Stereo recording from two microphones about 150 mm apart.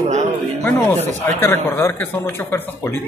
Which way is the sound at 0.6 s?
15° left (ahead or behind).